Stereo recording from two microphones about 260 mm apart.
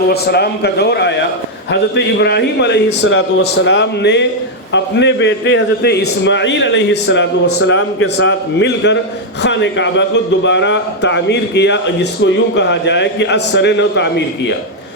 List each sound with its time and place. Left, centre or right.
0.1 s a man's voice: left